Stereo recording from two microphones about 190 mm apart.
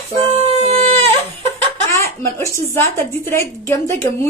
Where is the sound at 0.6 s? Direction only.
30° right (ahead or behind).